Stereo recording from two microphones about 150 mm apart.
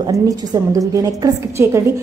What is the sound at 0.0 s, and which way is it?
A woman's voice, 25° right (ahead or behind).